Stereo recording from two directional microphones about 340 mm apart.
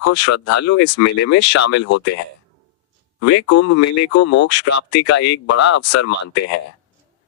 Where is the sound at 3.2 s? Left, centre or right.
Left.